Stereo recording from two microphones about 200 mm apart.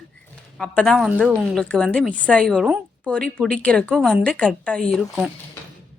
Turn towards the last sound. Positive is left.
turn(degrees=-5)  # may be behind; listen again after turning